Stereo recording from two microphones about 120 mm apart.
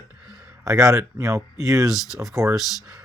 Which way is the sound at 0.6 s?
25° right (ahead or behind).